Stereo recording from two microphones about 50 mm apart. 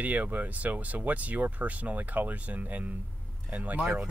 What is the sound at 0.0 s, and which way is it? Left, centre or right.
Speech, right.